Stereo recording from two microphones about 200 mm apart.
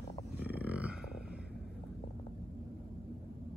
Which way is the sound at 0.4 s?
10° right (ahead or behind).